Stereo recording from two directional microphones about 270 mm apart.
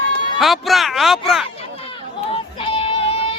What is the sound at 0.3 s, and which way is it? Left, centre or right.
Speech, centre.